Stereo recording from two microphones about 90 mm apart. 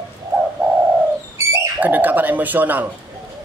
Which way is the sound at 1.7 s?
20° right (ahead or behind).